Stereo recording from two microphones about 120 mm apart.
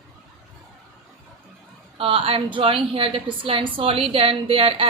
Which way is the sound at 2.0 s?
50° right (ahead or behind).